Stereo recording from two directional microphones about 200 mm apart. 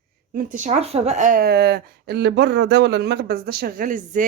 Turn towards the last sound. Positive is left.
turn(degrees=-40)  # may be behind; listen again after turning